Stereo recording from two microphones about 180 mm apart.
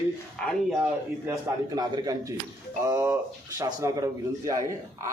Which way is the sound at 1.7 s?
20° right (ahead or behind).